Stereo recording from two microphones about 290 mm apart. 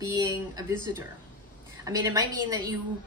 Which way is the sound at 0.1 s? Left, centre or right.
Centre.